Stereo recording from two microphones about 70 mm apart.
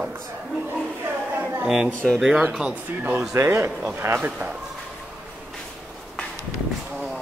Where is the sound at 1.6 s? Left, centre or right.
Centre.